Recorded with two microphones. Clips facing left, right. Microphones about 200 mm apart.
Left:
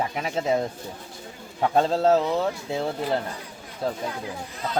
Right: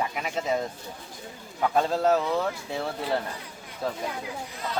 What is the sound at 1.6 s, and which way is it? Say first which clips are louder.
Speech: left 3 dB; 25° left (ahead or behind).